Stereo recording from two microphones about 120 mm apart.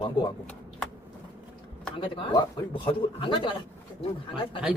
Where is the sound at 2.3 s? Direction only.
40° left (ahead or behind).